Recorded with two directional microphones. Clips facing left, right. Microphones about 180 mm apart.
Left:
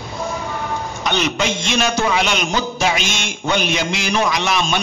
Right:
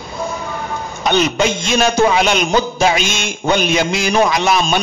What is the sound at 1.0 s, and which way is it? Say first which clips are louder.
A man's voice: right 6 dB; 45° right (ahead or behind).